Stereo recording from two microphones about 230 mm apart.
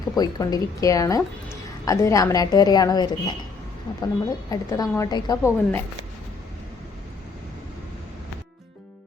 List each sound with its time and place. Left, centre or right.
0.2 s a woman's voice: centre